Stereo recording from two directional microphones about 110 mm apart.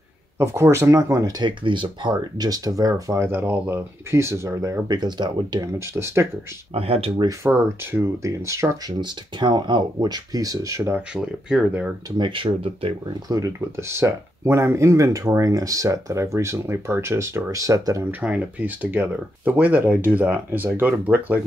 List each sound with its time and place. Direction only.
0.4 s speech: 25° right (ahead or behind)
1.4 s speech: 45° right (ahead or behind)
5.7 s speech: 25° right (ahead or behind)
6.7 s speech: 60° right (ahead or behind)
7.6 s speech: 20° right (ahead or behind)
9.0 s speech: 45° right (ahead or behind); by 11.0 s 25° right (ahead or behind)
11.0 s speech: 10° right (ahead or behind)
12.2 s speech: 50° right (ahead or behind)
13.3 s speech: 30° right (ahead or behind)
18.2 s speech: 15° right (ahead or behind)